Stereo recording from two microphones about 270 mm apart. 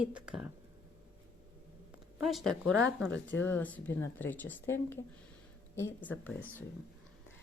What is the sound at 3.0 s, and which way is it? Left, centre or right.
Speech, left.